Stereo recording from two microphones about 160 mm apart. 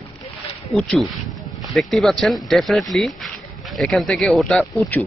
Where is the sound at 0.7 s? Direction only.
5° left (ahead or behind).